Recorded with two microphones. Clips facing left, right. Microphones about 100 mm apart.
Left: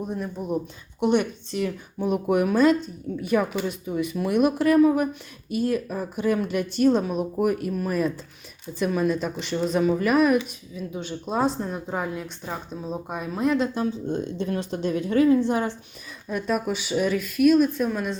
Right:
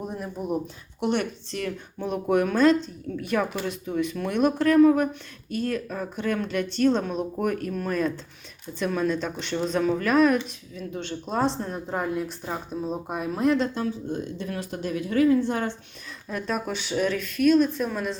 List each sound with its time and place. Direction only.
0.0 s speech: 5° right (ahead or behind)
13.7 s speech: 25° left (ahead or behind)
16.3 s speech: 5° left (ahead or behind)